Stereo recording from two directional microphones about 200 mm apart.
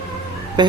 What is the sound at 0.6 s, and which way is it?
Speech, 20° right (ahead or behind).